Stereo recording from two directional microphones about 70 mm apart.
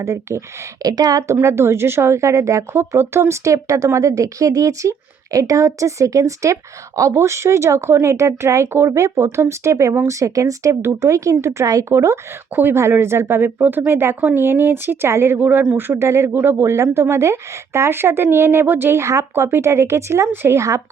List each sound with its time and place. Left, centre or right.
0.0 s speech: right
0.8 s a woman's voice: right
1.4 s speech: right
12.5 s speech: right